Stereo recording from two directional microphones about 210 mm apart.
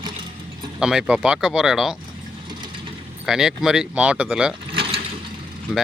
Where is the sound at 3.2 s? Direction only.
Centre (ahead or behind).